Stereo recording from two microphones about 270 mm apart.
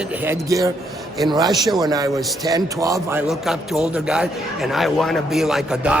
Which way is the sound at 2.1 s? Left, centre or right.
Centre.